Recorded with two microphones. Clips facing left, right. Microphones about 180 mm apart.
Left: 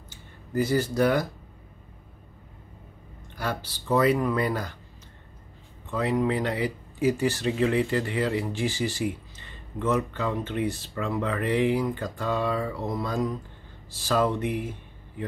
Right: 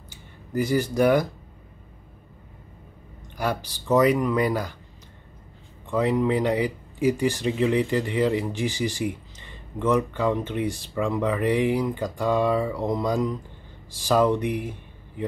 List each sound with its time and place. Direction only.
0.7 s speech: 15° right (ahead or behind)
3.3 s speech: 15° right (ahead or behind)
5.9 s speech: 15° right (ahead or behind)